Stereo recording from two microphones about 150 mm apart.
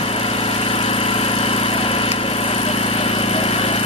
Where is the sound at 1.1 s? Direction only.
40° left (ahead or behind).